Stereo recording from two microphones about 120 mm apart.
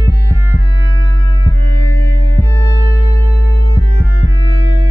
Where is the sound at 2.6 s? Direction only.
35° left (ahead or behind).